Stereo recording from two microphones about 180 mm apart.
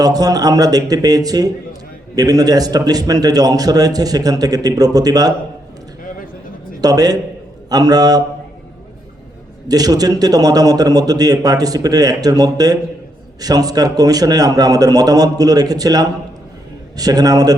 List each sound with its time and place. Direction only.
0.0 s a man's voice: 20° right (ahead or behind)
6.8 s a man's voice: 20° right (ahead or behind)
9.6 s a man's voice: 20° right (ahead or behind)